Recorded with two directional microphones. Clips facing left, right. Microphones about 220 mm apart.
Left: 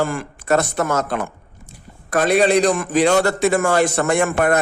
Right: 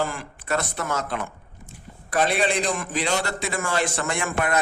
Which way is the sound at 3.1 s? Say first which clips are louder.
Left 10 dB; 60° left (ahead or behind).